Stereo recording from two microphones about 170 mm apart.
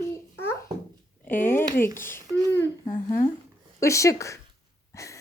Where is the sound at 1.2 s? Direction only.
10° left (ahead or behind).